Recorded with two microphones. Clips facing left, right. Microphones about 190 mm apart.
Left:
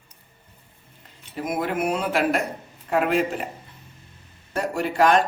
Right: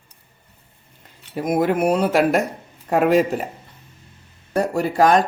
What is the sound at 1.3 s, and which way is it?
Speech, 45° right (ahead or behind).